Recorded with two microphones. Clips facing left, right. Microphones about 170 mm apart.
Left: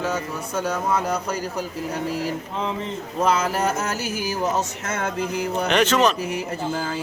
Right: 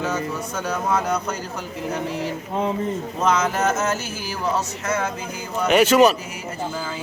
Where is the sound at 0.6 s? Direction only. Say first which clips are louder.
Even; 5° left (ahead or behind).